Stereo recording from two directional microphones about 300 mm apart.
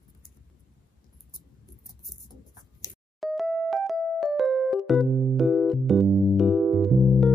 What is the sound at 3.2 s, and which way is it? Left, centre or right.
Music, centre.